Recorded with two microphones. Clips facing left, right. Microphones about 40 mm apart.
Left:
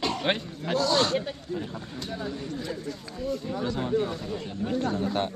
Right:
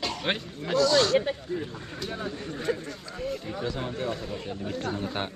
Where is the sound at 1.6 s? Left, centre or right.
Centre.